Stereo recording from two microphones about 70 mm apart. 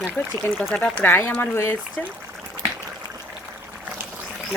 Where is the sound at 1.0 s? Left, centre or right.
Left.